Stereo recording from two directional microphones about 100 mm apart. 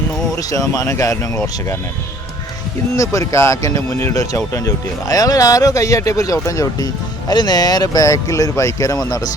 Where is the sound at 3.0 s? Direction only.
30° left (ahead or behind).